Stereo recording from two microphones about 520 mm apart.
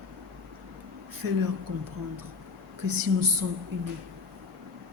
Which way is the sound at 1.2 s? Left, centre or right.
Right.